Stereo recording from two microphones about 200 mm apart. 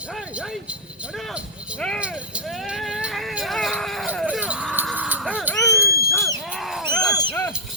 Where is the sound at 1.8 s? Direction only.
5° left (ahead or behind).